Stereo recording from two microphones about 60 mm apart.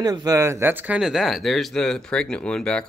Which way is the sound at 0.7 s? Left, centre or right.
Right.